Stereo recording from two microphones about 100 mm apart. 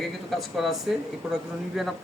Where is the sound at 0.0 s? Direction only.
Centre (ahead or behind).